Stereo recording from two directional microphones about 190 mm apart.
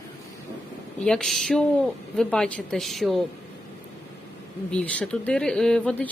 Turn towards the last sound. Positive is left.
turn(degrees=5)  # may be behind; listen again after turning